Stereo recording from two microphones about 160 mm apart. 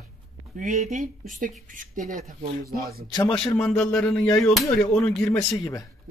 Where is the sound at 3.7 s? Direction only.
5° left (ahead or behind).